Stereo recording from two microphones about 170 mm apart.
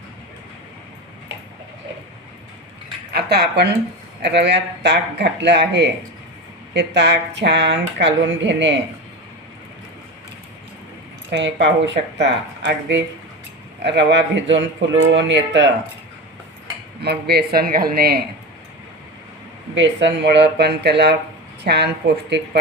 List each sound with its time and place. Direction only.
3.1 s speech: 70° right (ahead or behind)
4.2 s speech: 90° right
11.3 s speech: 90° right
17.0 s speech: 70° right (ahead or behind)
19.7 s a woman's voice: 90° right